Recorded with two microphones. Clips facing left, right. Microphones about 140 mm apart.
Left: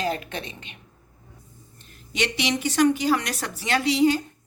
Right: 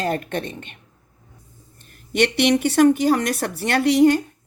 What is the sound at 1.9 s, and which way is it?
A woman's voice, 60° right (ahead or behind).